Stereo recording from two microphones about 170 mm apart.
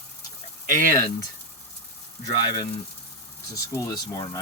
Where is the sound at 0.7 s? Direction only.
55° right (ahead or behind).